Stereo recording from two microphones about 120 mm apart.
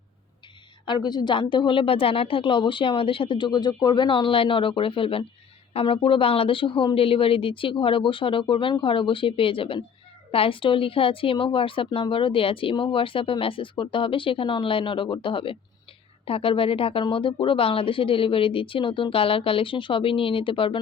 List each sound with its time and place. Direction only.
0.9 s a woman's voice: 40° left (ahead or behind)